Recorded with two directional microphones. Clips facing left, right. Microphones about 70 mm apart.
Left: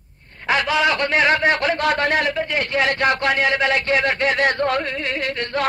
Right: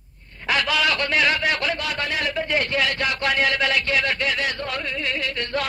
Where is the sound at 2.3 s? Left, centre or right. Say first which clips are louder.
Left 1 dB; left.